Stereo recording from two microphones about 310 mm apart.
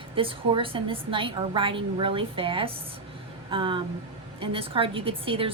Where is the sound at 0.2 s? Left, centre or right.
Centre.